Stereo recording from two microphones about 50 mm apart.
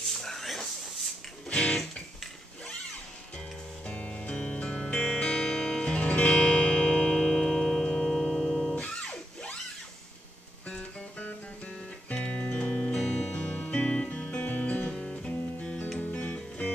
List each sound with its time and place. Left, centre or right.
0.0 s a sound: centre
1.5 s music: centre
3.8 s music: left
6.0 s music: left
6.3 s music: centre
8.8 s music: centre
12.1 s music: left
12.9 s music: centre
13.3 s music: left
15.0 s music: centre
16.0 s music: left